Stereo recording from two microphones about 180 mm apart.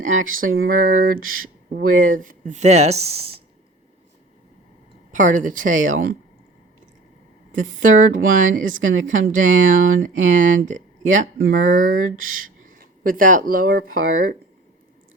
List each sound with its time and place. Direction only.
0.0 s speech: 50° right (ahead or behind)
5.1 s speech: 45° right (ahead or behind)
7.5 s speech: 50° right (ahead or behind)